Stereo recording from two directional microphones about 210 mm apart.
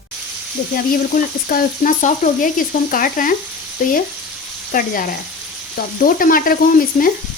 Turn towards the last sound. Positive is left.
turn(degrees=45)  # may be behind; listen again after turning